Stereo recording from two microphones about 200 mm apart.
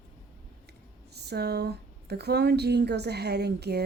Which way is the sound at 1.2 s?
55° right (ahead or behind).